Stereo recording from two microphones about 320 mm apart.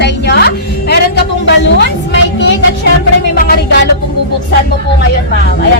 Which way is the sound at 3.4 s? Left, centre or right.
Left.